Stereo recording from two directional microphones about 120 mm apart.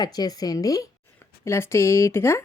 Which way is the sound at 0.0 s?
35° left (ahead or behind).